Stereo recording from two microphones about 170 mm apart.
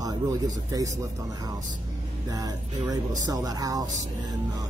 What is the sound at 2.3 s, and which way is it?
Speech, 20° right (ahead or behind).